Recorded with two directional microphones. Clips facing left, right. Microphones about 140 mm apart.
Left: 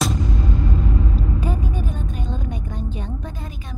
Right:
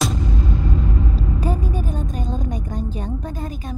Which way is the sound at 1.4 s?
40° right (ahead or behind).